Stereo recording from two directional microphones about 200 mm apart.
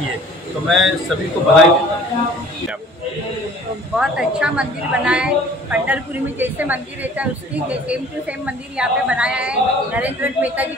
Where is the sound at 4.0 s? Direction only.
5° right (ahead or behind).